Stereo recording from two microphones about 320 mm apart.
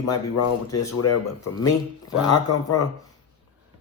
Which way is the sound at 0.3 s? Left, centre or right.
Left.